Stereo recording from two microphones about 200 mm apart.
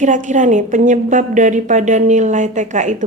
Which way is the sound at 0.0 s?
40° right (ahead or behind).